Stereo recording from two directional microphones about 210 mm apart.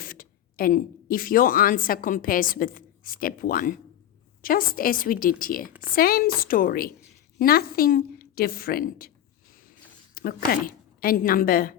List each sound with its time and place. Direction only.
0.0 s a woman's voice: 45° left (ahead or behind)
10.2 s a woman's voice: 45° left (ahead or behind)